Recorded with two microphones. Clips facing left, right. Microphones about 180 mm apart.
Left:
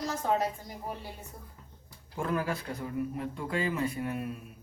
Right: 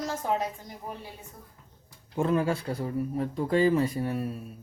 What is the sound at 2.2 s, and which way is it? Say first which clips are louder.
Speech: right 6 dB; 25° right (ahead or behind).